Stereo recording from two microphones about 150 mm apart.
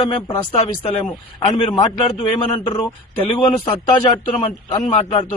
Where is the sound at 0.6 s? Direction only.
40° left (ahead or behind).